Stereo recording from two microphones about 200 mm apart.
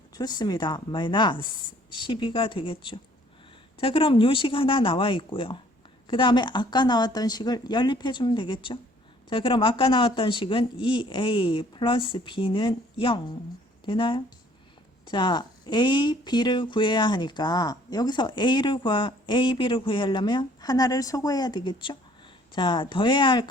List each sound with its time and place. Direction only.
0.1 s speech: 20° left (ahead or behind)